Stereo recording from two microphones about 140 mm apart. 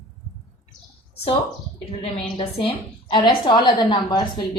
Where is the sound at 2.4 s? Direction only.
40° left (ahead or behind).